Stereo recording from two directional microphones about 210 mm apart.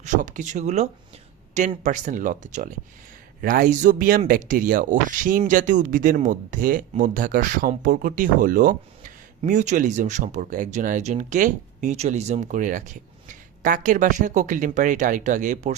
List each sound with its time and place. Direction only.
0.0 s speech: 35° right (ahead or behind)